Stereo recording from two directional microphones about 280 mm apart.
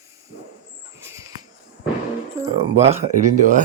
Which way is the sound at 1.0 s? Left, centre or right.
Centre.